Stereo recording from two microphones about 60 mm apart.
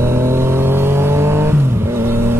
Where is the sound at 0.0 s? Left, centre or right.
Right.